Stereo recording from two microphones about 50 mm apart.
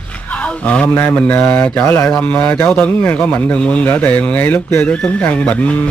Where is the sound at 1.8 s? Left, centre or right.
Left.